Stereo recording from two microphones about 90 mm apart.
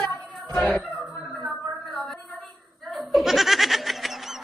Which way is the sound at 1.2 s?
5° right (ahead or behind).